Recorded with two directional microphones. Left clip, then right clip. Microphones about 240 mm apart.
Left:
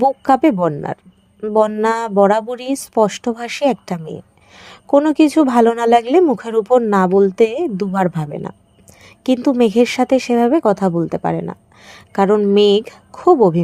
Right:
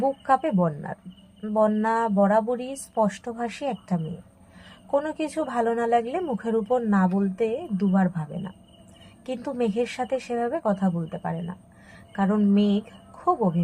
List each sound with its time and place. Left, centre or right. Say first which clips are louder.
0.2 s speech: left 9 dB; left
13.1 s a woman's voice: left 12 dB; left